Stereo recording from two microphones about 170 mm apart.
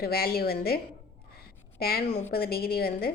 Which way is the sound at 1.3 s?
65° left (ahead or behind).